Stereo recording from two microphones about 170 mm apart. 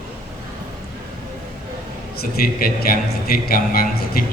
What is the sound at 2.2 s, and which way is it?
A man's voice, 60° left (ahead or behind).